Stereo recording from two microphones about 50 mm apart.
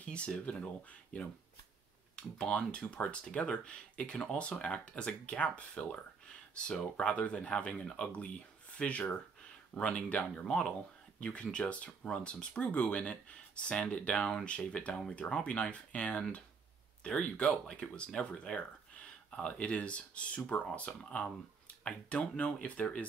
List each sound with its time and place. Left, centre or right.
0.1 s speech: left
2.1 s speech: centre
6.2 s speech: centre